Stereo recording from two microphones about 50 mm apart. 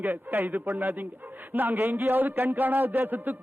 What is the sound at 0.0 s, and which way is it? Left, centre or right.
A man's voice, right.